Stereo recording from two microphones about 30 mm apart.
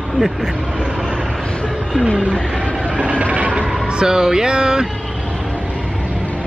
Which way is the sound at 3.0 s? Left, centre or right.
Right.